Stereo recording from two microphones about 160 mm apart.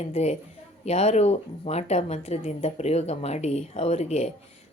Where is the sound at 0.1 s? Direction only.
45° left (ahead or behind).